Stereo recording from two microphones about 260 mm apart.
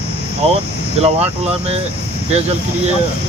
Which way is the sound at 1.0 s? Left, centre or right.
Right.